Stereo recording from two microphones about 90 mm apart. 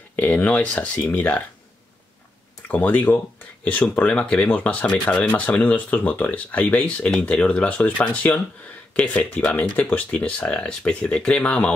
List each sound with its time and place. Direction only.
0.1 s speech: 15° left (ahead or behind)
2.7 s speech: 20° left (ahead or behind)